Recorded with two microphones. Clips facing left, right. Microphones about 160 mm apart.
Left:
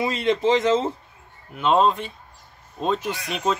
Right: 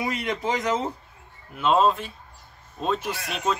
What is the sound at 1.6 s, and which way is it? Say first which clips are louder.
Speech: left 1 dB; centre (ahead or behind).